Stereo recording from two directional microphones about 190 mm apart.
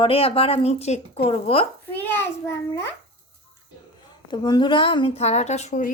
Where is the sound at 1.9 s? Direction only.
10° left (ahead or behind).